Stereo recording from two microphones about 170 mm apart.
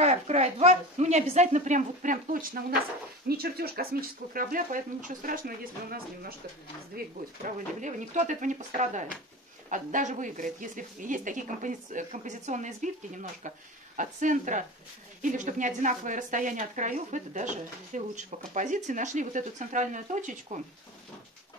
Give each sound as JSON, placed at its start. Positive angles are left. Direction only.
{"t": 0.0, "sound": "a woman's voice", "side_deg": -40}
{"t": 3.3, "sound": "speech", "side_deg": -65}
{"t": 7.4, "sound": "speech", "side_deg": -45}